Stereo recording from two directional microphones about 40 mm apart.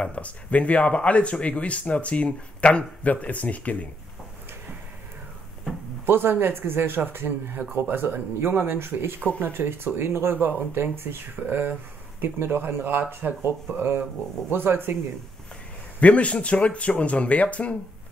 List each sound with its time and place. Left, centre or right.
0.0 s speech: left
6.0 s speech: right
9.9 s speech: right
11.4 s speech: right
16.0 s speech: left